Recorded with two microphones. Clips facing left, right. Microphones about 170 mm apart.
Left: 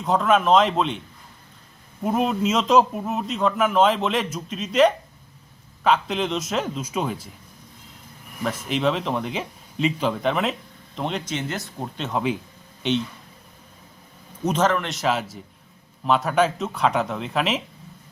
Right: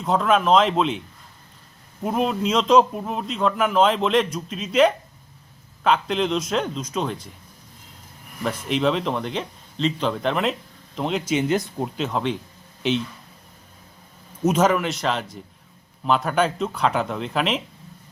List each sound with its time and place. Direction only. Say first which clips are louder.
0.0 s a man's voice: even; centre (ahead or behind)
2.0 s a man's voice: left 1 dB; centre (ahead or behind)
8.4 s a man's voice: right 1 dB; centre (ahead or behind); by 11.9 s 15° right (ahead or behind)
11.9 s a man's voice: left 1 dB; centre (ahead or behind)
14.4 s a man's voice: right 3 dB; 10° right (ahead or behind)